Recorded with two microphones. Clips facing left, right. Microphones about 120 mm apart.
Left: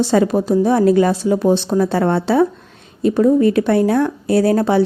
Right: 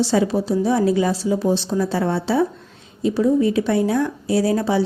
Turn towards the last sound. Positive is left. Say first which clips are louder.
# left 5 dB
turn(degrees=55)  # may be behind; listen again after turning